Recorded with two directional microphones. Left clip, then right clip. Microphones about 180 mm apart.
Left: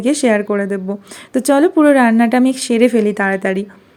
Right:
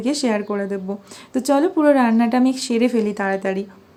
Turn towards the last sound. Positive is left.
turn(degrees=25)  # may be behind; listen again after turning